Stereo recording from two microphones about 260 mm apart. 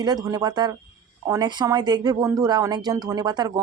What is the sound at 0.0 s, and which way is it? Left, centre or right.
Speech, centre.